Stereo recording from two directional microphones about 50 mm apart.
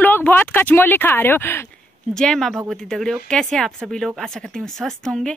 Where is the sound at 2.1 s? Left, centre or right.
Centre.